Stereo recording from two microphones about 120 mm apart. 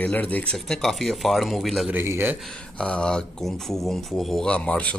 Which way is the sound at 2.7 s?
10° left (ahead or behind).